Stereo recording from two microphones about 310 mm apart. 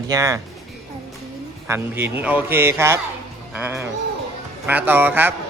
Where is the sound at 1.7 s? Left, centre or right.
Centre.